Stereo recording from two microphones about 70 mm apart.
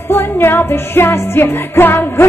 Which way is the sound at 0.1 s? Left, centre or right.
Left.